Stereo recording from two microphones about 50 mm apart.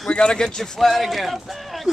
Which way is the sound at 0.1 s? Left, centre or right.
Centre.